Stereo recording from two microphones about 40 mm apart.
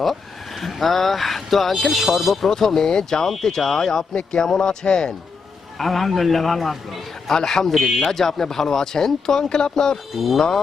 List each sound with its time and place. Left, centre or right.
0.6 s speech: centre
2.5 s speech: centre
4.1 s speech: left
5.8 s speech: centre
7.3 s speech: centre
7.7 s speech: centre
10.2 s speech: centre